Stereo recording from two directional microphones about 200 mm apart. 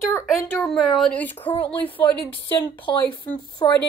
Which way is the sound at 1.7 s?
25° left (ahead or behind).